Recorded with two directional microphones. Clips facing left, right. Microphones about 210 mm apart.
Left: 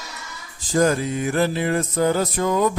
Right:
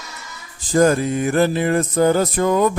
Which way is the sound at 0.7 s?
50° right (ahead or behind).